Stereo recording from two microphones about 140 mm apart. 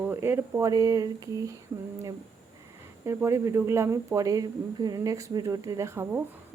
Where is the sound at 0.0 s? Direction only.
15° right (ahead or behind).